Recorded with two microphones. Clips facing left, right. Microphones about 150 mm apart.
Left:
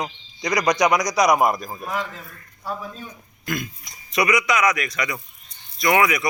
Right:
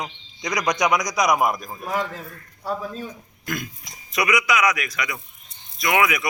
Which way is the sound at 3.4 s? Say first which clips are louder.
Left 2 dB; centre (ahead or behind).